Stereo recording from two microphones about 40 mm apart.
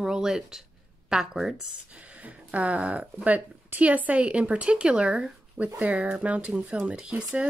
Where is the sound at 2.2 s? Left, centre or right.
Right.